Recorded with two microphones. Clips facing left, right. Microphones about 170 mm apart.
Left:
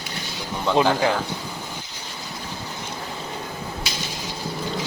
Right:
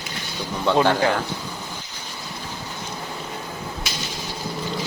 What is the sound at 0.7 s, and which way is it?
Speech, 5° left (ahead or behind).